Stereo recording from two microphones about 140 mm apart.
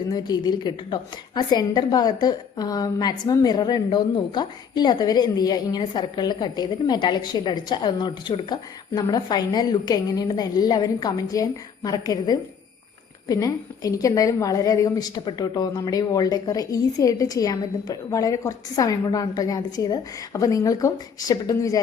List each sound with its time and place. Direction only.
0.1 s a woman's voice: 30° left (ahead or behind)